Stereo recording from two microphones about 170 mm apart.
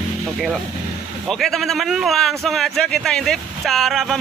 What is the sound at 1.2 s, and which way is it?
A man's voice, centre (ahead or behind).